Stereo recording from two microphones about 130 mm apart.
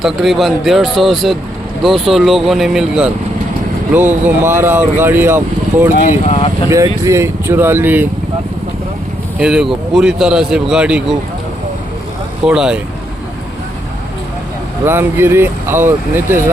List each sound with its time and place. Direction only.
0.0 s speech: centre (ahead or behind)
3.9 s speech: 15° right (ahead or behind)
6.1 s speech: 60° left (ahead or behind)
6.7 s speech: 25° right (ahead or behind)
9.4 s speech: 5° right (ahead or behind)
12.5 s speech: 5° right (ahead or behind)
14.8 s speech: 20° right (ahead or behind)